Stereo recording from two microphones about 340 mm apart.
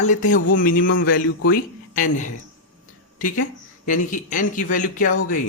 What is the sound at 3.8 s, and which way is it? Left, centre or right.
Speech, left.